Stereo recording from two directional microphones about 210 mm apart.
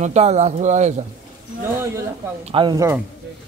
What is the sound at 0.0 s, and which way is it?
Speech, 30° right (ahead or behind).